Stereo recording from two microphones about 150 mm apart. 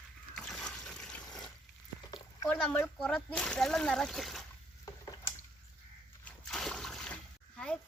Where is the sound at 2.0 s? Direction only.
25° left (ahead or behind).